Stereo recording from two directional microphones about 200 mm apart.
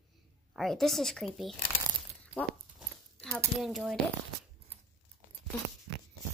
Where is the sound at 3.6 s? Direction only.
Centre (ahead or behind).